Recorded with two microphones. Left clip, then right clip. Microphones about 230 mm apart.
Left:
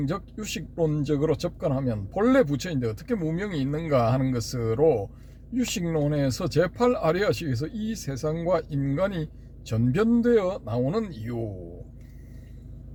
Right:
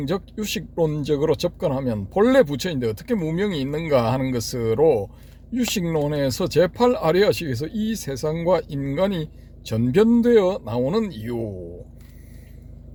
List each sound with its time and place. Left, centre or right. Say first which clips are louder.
0.0 s speech: right 5 dB; right